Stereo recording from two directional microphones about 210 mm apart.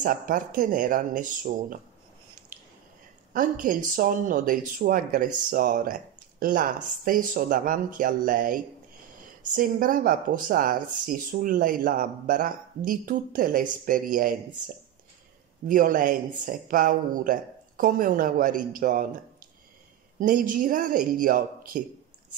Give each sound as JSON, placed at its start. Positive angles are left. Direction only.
{"t": 0.0, "sound": "speech", "side_deg": -40}
{"t": 3.3, "sound": "speech", "side_deg": -40}
{"t": 9.8, "sound": "speech", "side_deg": -40}
{"t": 15.7, "sound": "speech", "side_deg": -40}